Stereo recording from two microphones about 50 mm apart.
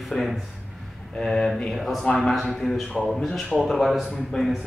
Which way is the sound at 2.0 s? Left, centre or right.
Centre.